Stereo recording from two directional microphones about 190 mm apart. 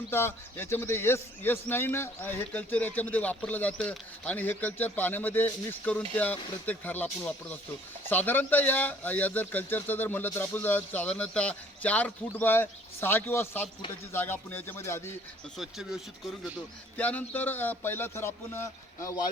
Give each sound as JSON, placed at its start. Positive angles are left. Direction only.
{"t": 0.1, "sound": "speech", "side_deg": 10}
{"t": 15.5, "sound": "speech", "side_deg": 0}